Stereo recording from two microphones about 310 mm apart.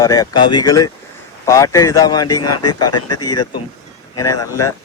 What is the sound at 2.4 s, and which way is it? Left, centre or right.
Speech, left.